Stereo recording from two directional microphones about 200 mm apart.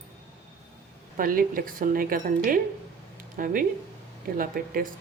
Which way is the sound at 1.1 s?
45° right (ahead or behind).